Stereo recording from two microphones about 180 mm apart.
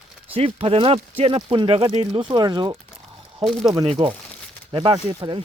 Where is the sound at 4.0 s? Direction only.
30° right (ahead or behind).